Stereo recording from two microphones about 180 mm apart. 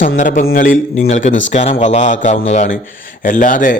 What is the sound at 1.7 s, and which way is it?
A man's voice, 40° left (ahead or behind).